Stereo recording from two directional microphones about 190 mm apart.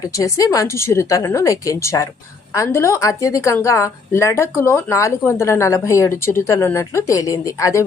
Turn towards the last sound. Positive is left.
turn(degrees=15)  # may be behind; listen again after turning